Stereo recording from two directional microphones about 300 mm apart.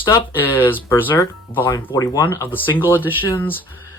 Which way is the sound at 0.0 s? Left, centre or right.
Centre.